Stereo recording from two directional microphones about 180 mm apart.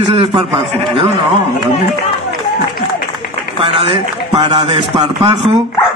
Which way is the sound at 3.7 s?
30° right (ahead or behind).